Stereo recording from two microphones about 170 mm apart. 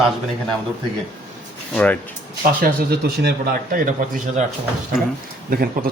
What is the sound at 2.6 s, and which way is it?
Speech, 65° right (ahead or behind).